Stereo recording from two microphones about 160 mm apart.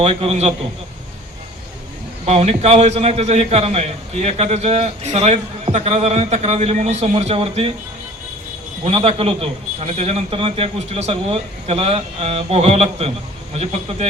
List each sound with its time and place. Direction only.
0.0 s a man's voice: 40° right (ahead or behind)
2.2 s a man's voice: 40° right (ahead or behind)
8.8 s a man's voice: 35° right (ahead or behind)